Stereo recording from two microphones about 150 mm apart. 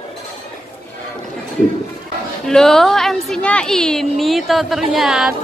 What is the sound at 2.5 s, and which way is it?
A woman's voice, 5° left (ahead or behind).